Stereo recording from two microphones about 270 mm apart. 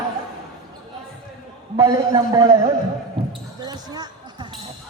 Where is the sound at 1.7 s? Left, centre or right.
Centre.